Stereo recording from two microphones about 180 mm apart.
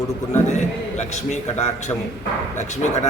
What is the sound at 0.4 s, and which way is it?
A man's voice, 40° left (ahead or behind).